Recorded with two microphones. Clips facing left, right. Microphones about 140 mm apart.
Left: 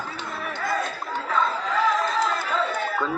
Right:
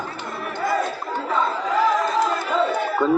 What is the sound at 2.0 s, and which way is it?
Crowd, 20° right (ahead or behind).